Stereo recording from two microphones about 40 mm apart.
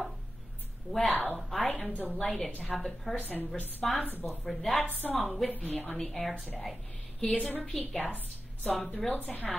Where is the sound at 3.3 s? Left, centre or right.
Left.